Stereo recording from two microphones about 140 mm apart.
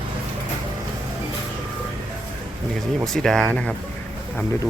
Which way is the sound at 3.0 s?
5° left (ahead or behind).